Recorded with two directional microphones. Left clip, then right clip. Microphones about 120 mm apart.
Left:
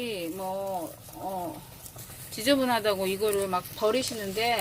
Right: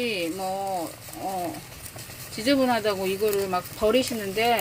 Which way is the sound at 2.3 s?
Centre (ahead or behind).